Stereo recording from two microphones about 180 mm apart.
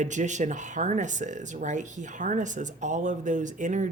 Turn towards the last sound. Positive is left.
turn(degrees=-45)  # may be behind; listen again after turning